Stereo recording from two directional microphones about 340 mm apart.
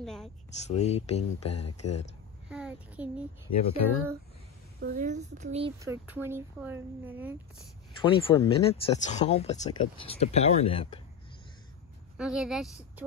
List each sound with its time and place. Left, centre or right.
0.0 s a sound: centre
0.7 s speech: centre
2.5 s a child's voice: centre
3.5 s speech: left
4.7 s speech: right; by 7.3 s centre
8.0 s speech: centre
12.2 s a woman's voice: centre